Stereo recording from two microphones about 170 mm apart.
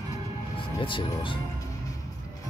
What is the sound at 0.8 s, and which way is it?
Music, 30° left (ahead or behind).